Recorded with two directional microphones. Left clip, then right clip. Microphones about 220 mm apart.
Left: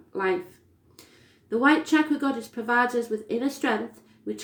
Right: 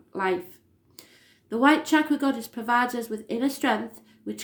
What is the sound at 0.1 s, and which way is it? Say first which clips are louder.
Speech: even; 35° right (ahead or behind).